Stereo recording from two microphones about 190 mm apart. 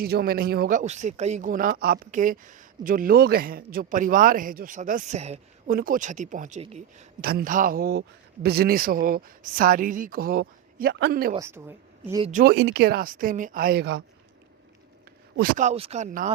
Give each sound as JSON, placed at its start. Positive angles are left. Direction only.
{"t": 0.0, "sound": "speech", "side_deg": -55}
{"t": 7.2, "sound": "speech", "side_deg": -50}
{"t": 11.3, "sound": "a woman's voice", "side_deg": -15}
{"t": 12.2, "sound": "speech", "side_deg": -40}
{"t": 12.5, "sound": "speech", "side_deg": -60}
{"t": 15.4, "sound": "speech", "side_deg": -45}